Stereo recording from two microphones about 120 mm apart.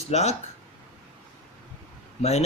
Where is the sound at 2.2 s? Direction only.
65° left (ahead or behind).